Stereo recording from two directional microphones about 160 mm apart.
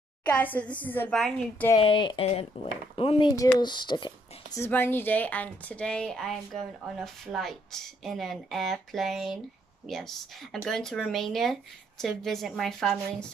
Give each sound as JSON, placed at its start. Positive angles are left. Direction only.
{"t": 0.2, "sound": "a woman's voice", "side_deg": 10}
{"t": 1.8, "sound": "speech", "side_deg": 35}
{"t": 4.6, "sound": "a woman's voice", "side_deg": 15}